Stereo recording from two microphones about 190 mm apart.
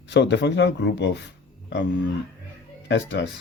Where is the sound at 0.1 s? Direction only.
65° left (ahead or behind).